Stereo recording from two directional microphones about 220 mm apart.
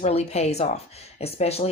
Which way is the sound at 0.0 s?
30° left (ahead or behind).